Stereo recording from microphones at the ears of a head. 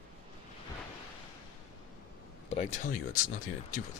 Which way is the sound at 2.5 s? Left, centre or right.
Left.